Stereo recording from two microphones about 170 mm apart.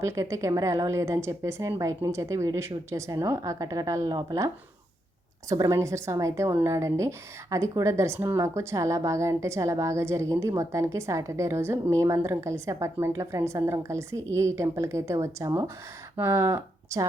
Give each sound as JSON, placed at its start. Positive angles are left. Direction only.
{"t": 0.0, "sound": "a woman's voice", "side_deg": -15}